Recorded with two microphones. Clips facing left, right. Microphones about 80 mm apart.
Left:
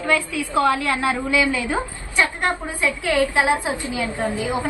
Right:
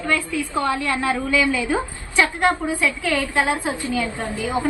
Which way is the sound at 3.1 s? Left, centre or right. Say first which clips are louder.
Left 6 dB; centre.